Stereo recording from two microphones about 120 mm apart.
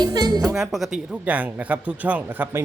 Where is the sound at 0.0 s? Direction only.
35° right (ahead or behind).